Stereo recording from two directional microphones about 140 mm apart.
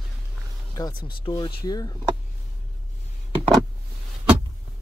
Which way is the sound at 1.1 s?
35° left (ahead or behind).